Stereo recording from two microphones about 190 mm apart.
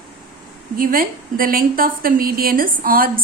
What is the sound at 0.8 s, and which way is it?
A woman's voice, 50° right (ahead or behind).